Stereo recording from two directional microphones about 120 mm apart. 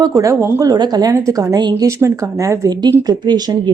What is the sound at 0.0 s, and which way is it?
A woman's voice, 30° right (ahead or behind).